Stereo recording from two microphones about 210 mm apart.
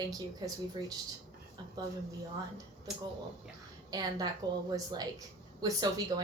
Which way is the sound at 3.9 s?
15° right (ahead or behind).